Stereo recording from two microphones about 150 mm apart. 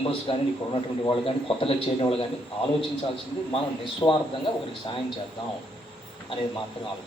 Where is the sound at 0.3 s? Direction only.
35° left (ahead or behind).